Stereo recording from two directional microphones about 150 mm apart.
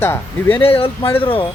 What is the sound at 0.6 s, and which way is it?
Speech, 40° left (ahead or behind).